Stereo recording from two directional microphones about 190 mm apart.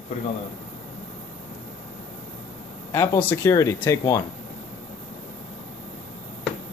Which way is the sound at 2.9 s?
15° left (ahead or behind).